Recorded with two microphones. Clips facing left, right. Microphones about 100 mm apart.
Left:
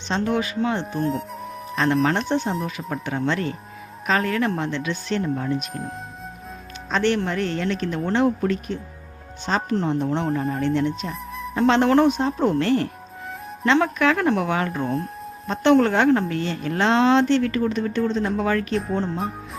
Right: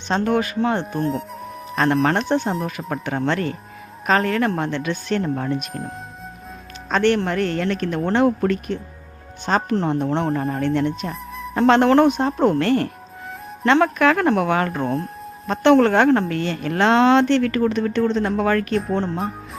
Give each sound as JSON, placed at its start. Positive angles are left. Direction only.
{"t": 0.1, "sound": "speech", "side_deg": -50}
{"t": 0.9, "sound": "speech", "side_deg": 0}
{"t": 1.7, "sound": "a woman's voice", "side_deg": -50}
{"t": 6.9, "sound": "a woman's voice", "side_deg": -55}
{"t": 10.6, "sound": "a woman's voice", "side_deg": -55}